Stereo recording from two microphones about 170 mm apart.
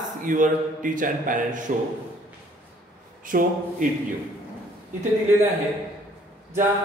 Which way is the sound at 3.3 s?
55° right (ahead or behind).